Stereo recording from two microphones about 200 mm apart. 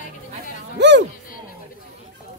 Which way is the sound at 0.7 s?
60° right (ahead or behind).